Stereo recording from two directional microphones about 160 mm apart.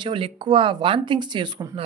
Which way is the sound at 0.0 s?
30° right (ahead or behind).